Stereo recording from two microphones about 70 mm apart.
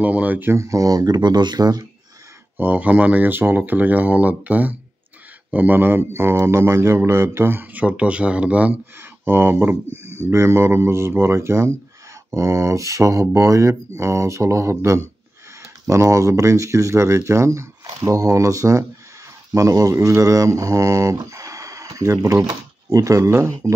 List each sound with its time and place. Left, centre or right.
0.0 s speech: right
0.5 s speech: right
2.5 s speech: right
7.8 s speech: centre
9.2 s speech: right
21.3 s a sound: right
22.2 s speech: right